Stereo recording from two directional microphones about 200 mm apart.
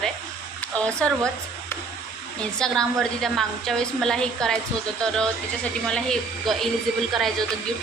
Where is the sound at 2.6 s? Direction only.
Centre (ahead or behind).